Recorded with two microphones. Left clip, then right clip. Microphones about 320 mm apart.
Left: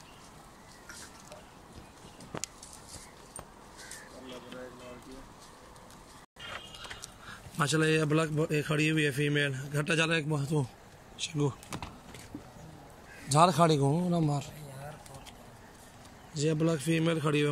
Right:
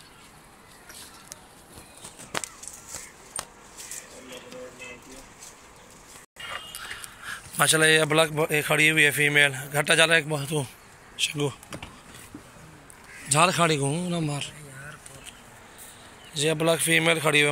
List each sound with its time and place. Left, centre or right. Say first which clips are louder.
2.3 s a sound: right 8 dB; right
7.2 s a man's voice: right 9 dB; centre
13.3 s a man's voice: right 3 dB; centre
16.3 s a man's voice: right 7 dB; centre